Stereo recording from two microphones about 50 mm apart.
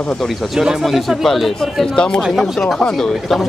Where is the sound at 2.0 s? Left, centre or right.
Centre.